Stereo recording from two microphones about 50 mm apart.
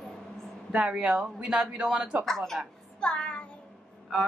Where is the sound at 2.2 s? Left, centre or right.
Centre.